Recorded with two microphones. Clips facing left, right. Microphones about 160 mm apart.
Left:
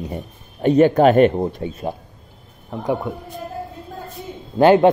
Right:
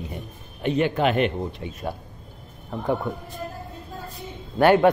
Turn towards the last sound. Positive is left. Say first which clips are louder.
# left 4 dB
turn(degrees=20)  # may be behind; listen again after turning